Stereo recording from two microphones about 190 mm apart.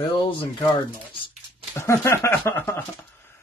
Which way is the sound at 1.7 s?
15° left (ahead or behind).